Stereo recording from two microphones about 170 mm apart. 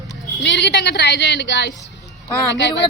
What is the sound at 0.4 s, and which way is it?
A woman's voice, 80° left.